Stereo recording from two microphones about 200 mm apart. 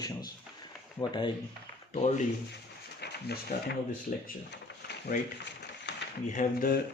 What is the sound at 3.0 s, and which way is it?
Speech, 55° left (ahead or behind).